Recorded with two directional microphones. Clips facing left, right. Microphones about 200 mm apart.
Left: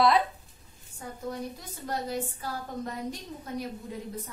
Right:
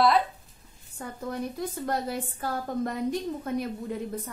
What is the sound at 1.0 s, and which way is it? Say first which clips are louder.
A woman's voice: right 3 dB; 60° right (ahead or behind).